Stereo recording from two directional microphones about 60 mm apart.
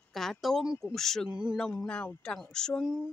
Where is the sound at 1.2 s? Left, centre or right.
Centre.